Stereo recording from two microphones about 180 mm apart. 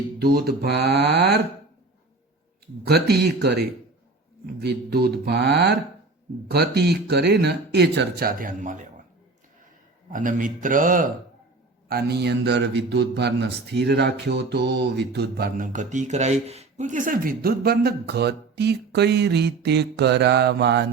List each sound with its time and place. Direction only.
0.2 s speech: 60° right (ahead or behind)
2.8 s speech: 65° right (ahead or behind)
4.6 s speech: 65° right (ahead or behind); by 8.9 s 45° right (ahead or behind)
10.1 s a man's voice: 45° right (ahead or behind)
11.9 s a man's voice: 60° right (ahead or behind)